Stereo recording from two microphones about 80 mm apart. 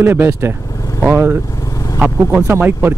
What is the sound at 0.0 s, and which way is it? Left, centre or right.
Speech, right.